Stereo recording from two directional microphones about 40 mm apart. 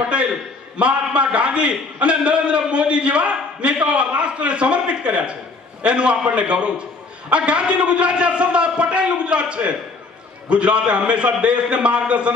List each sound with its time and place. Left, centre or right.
0.0 s a man's voice: right